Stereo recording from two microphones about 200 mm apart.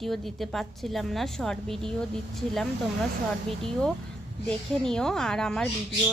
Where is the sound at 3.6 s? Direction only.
Centre (ahead or behind).